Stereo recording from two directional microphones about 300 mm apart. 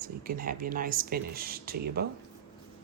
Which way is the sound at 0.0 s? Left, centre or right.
Right.